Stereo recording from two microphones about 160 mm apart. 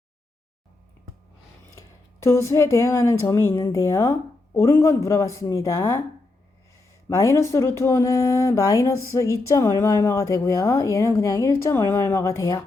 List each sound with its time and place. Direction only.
2.2 s a woman's voice: 15° left (ahead or behind)
7.1 s speech: 20° left (ahead or behind)